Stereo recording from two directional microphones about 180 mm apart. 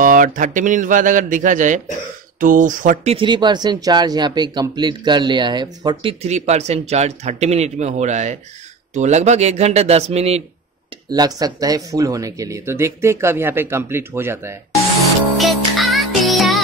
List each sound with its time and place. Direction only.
0.0 s speech: 50° right (ahead or behind)
3.2 s speech: 25° right (ahead or behind)
6.2 s speech: 35° right (ahead or behind)
11.1 s speech: 20° right (ahead or behind)
15.3 s music: centre (ahead or behind)